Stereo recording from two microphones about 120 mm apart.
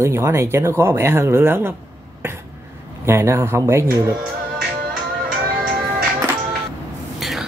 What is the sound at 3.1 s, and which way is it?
Speech, 20° right (ahead or behind).